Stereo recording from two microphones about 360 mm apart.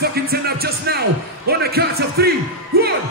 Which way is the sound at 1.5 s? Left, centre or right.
Right.